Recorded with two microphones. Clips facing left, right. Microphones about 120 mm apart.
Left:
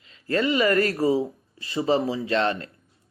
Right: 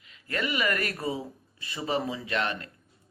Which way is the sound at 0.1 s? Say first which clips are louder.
Left 8 dB; 30° left (ahead or behind).